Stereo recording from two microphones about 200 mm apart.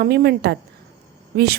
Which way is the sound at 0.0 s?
55° right (ahead or behind).